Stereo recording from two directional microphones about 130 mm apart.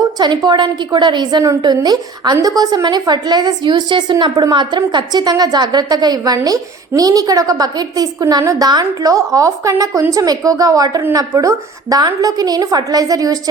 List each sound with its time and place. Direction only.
0.2 s a woman's voice: 35° right (ahead or behind)